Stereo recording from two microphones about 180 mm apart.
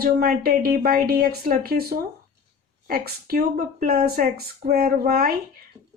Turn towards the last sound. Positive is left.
turn(degrees=-55)  # may be behind; listen again after turning